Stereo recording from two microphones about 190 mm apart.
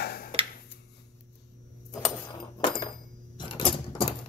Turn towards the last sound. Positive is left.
turn(degrees=25)  # may be behind; listen again after turning